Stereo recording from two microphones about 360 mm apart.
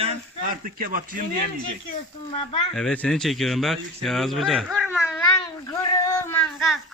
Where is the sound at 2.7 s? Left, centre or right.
Centre.